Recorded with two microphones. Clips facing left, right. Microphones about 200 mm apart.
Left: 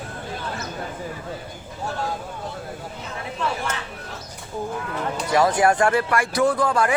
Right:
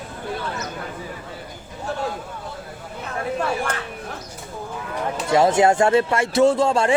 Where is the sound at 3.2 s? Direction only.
50° right (ahead or behind).